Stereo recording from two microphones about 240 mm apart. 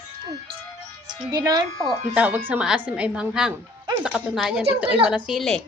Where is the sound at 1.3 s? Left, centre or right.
Centre.